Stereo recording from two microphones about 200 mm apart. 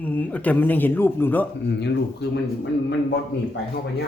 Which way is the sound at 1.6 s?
60° left (ahead or behind).